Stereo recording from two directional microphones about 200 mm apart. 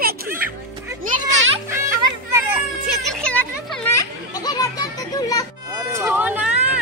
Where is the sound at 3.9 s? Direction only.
15° left (ahead or behind).